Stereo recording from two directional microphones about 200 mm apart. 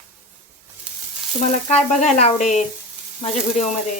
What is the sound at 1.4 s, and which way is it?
Sizzle, 35° left (ahead or behind).